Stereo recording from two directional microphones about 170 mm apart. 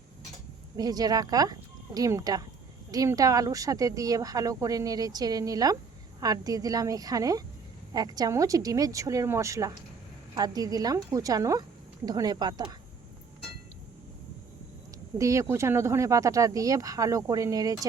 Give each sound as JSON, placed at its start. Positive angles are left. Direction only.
{"t": 0.8, "sound": "speech", "side_deg": -20}
{"t": 15.2, "sound": "speech", "side_deg": -15}